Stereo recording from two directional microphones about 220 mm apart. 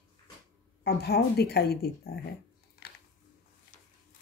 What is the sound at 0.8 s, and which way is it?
Speech, 45° left (ahead or behind).